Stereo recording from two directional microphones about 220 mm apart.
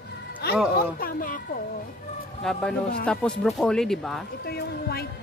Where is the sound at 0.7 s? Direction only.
40° left (ahead or behind).